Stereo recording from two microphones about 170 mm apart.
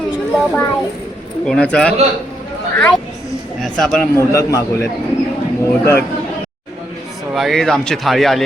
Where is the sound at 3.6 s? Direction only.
Centre (ahead or behind).